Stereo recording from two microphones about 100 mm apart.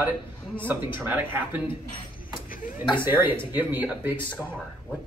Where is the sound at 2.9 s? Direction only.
20° right (ahead or behind).